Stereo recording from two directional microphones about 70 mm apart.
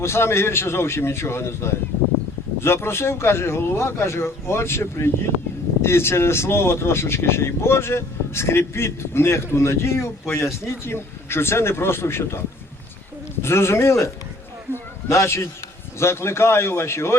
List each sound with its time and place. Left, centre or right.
0.0 s speech: left
14.7 s a sound: left
15.1 s a man's voice: left